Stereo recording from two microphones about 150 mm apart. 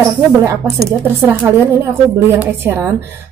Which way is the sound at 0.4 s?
15° right (ahead or behind).